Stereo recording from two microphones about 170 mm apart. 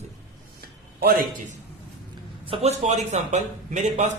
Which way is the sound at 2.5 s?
40° right (ahead or behind).